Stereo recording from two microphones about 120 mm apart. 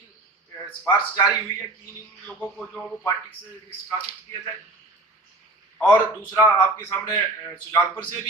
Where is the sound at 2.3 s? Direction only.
10° left (ahead or behind).